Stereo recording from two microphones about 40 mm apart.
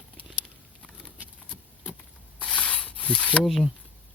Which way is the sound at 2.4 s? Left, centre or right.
Left.